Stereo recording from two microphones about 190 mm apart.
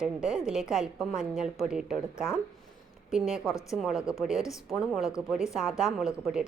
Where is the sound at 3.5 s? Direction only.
15° left (ahead or behind).